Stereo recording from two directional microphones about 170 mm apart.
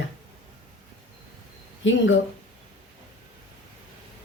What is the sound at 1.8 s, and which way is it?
Speech, 90° left.